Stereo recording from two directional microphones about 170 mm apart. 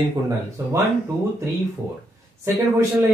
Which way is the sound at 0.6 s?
15° right (ahead or behind).